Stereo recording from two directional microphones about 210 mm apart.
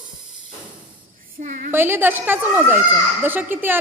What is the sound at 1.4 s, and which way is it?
Speech, 35° right (ahead or behind).